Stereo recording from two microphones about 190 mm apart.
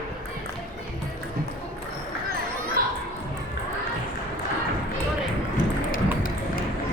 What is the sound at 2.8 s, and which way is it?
Children playing, 50° right (ahead or behind).